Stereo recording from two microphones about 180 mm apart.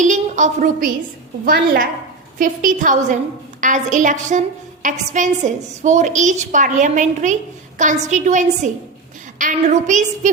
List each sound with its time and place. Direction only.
0.0 s a woman's voice: 45° right (ahead or behind)
1.5 s a woman's voice: 55° right (ahead or behind)